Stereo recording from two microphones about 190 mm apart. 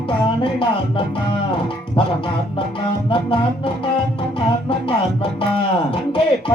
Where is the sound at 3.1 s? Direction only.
25° left (ahead or behind).